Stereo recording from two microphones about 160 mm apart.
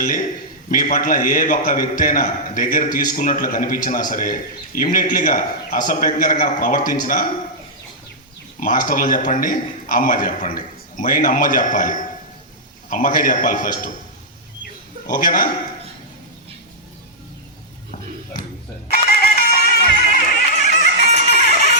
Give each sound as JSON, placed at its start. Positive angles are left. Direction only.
{"t": 0.0, "sound": "a man's voice", "side_deg": 60}
{"t": 8.6, "sound": "a man's voice", "side_deg": 60}
{"t": 15.0, "sound": "a man's voice", "side_deg": 60}
{"t": 18.9, "sound": "music", "side_deg": 70}
{"t": 20.8, "sound": "music", "side_deg": 85}